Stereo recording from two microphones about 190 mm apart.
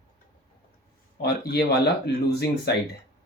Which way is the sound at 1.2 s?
60° left (ahead or behind).